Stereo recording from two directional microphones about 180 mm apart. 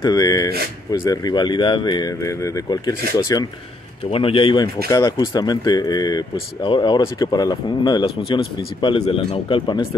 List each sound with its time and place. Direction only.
0.0 s speech: 20° left (ahead or behind)
4.1 s speech: 30° left (ahead or behind)